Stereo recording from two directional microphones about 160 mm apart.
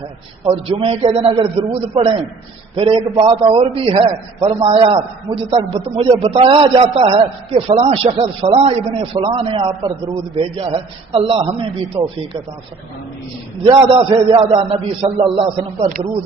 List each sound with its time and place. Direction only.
0.4 s a man's voice: 40° right (ahead or behind)
13.7 s a man's voice: 35° right (ahead or behind)